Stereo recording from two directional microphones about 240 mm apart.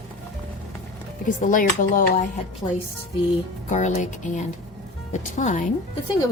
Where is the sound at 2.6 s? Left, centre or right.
Centre.